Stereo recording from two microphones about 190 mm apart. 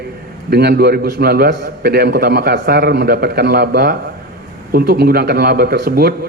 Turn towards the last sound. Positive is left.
turn(degrees=-55)  # may be behind; listen again after turning